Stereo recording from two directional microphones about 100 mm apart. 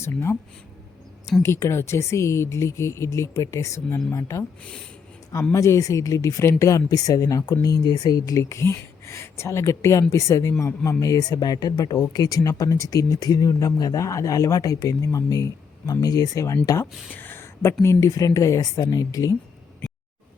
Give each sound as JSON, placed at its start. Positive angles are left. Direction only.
{"t": 0.0, "sound": "speech", "side_deg": 25}
{"t": 1.4, "sound": "speech", "side_deg": 30}
{"t": 4.6, "sound": "speech", "side_deg": 10}
{"t": 5.5, "sound": "speech", "side_deg": 30}
{"t": 17.2, "sound": "a sound", "side_deg": 20}
{"t": 17.8, "sound": "speech", "side_deg": 35}